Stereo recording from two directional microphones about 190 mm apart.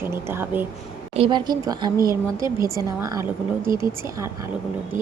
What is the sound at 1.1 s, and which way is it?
A woman's voice, 25° right (ahead or behind).